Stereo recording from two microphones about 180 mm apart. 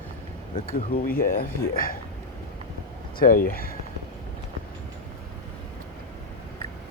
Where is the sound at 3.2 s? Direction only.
50° left (ahead or behind).